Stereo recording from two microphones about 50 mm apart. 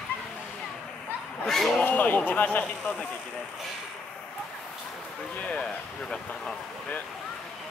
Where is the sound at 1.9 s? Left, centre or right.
Left.